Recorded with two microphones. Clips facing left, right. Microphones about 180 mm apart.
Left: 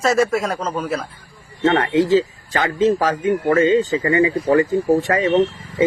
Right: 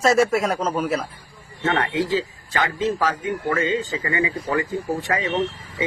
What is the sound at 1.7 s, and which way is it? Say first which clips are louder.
Speech: left 6 dB; 40° left (ahead or behind).